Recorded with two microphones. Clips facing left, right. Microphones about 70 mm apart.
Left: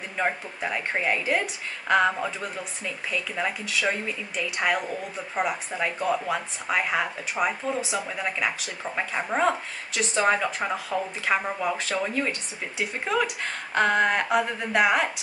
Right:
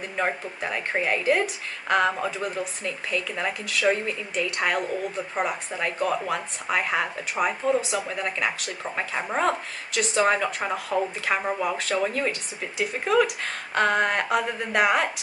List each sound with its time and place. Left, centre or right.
0.2 s speech: centre